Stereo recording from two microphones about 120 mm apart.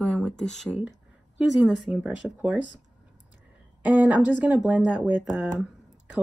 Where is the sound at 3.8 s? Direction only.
10° right (ahead or behind).